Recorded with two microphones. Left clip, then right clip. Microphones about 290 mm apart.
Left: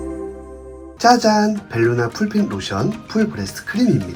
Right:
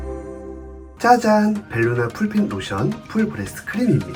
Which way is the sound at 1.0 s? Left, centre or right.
Centre.